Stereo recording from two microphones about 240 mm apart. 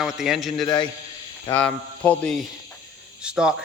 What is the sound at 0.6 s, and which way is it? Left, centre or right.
Speech, centre.